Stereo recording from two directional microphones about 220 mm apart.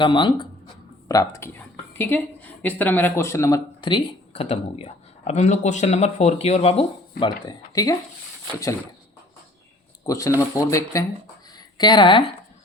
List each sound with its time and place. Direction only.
0.0 s a woman's voice: 20° left (ahead or behind)
10.1 s speech: 15° left (ahead or behind)